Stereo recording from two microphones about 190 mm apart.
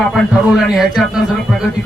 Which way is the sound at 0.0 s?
Centre (ahead or behind).